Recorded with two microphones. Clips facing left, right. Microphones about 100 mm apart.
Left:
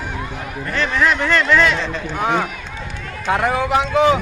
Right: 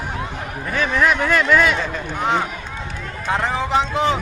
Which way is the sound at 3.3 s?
10° left (ahead or behind).